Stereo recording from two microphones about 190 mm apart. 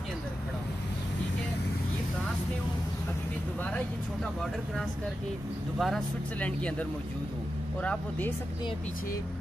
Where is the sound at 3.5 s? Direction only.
5° left (ahead or behind).